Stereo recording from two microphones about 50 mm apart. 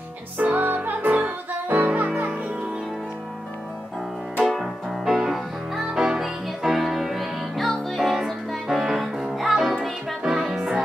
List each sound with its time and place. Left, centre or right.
0.4 s music: right
4.5 s music: centre